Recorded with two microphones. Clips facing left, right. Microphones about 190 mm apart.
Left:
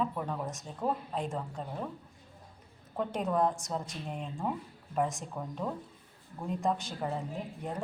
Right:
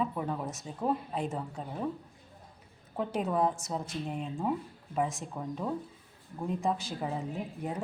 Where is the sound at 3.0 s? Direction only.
5° right (ahead or behind).